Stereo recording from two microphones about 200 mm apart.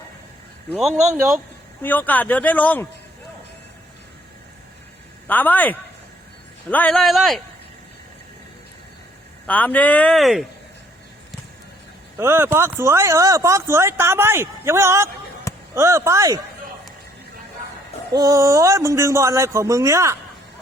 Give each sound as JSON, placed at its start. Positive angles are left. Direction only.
{"t": 0.7, "sound": "speech", "side_deg": 0}
{"t": 5.3, "sound": "speech", "side_deg": 10}
{"t": 9.5, "sound": "speech", "side_deg": 10}
{"t": 12.1, "sound": "speech", "side_deg": -10}
{"t": 18.1, "sound": "speech", "side_deg": -15}